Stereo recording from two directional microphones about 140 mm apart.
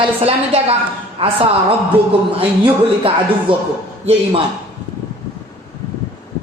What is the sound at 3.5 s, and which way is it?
Speech, 40° right (ahead or behind).